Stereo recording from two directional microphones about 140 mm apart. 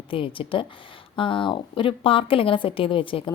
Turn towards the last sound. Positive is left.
turn(degrees=40)  # may be behind; listen again after turning